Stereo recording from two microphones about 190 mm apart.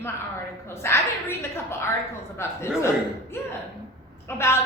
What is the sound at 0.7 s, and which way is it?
A woman's voice, 15° left (ahead or behind).